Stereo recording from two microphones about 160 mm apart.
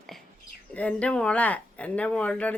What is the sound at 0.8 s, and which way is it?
Speech, 10° left (ahead or behind).